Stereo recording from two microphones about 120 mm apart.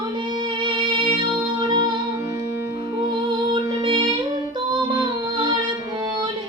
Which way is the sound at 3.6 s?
45° right (ahead or behind).